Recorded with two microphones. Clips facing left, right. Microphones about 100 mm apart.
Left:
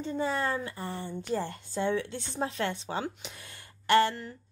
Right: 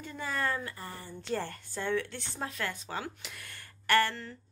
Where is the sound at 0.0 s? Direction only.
25° left (ahead or behind).